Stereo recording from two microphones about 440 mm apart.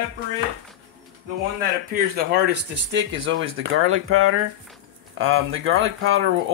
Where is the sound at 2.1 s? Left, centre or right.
Right.